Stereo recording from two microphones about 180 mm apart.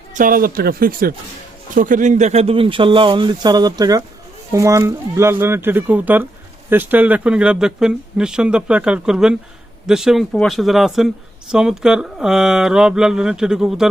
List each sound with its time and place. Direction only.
0.1 s speech: 50° right (ahead or behind); by 13.9 s 5° right (ahead or behind)